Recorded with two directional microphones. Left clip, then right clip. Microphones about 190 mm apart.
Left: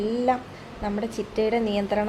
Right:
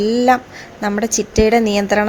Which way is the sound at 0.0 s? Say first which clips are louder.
Right 10 dB; 40° right (ahead or behind).